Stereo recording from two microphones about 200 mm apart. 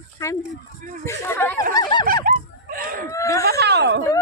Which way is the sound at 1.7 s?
20° left (ahead or behind).